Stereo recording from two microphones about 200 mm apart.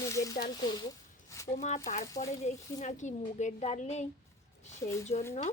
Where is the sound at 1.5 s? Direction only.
35° left (ahead or behind).